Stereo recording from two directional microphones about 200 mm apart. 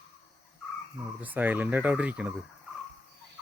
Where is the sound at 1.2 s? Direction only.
10° right (ahead or behind).